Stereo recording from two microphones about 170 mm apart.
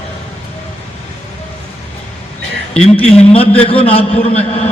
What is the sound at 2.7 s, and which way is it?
A man's voice, 35° left (ahead or behind).